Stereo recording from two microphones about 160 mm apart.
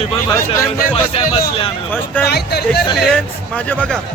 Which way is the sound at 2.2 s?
90° left.